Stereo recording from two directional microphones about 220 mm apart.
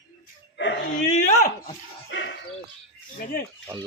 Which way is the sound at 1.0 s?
35° left (ahead or behind).